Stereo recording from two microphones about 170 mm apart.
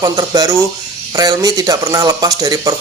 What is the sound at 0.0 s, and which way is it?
Speech, 20° right (ahead or behind).